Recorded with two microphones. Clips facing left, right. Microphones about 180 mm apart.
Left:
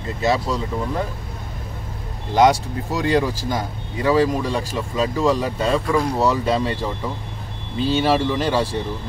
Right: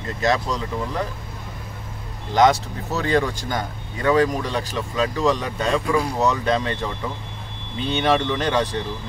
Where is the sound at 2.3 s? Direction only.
10° left (ahead or behind).